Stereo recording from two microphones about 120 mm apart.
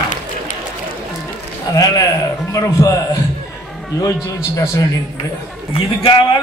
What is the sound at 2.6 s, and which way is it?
Speech, 30° left (ahead or behind).